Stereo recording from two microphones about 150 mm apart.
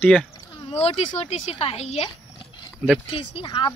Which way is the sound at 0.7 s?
45° left (ahead or behind).